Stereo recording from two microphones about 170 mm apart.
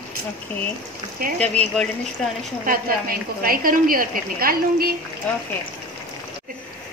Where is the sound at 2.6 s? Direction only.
60° right (ahead or behind).